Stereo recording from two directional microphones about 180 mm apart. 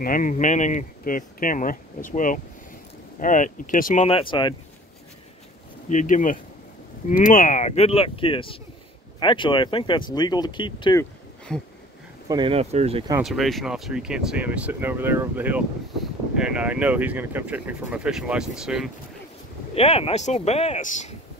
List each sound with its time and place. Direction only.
0.0 s speech: 50° left (ahead or behind); by 4.6 s 25° left (ahead or behind)
5.9 s speech: 45° left (ahead or behind); by 11.0 s 25° left (ahead or behind)
11.0 s a sound: 5° left (ahead or behind)
12.3 s speech: 25° right (ahead or behind)
13.2 s speech: centre (ahead or behind)
19.7 s speech: 35° left (ahead or behind)